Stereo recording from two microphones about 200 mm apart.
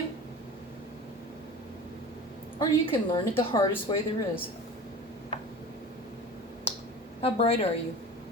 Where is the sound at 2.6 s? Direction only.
25° left (ahead or behind).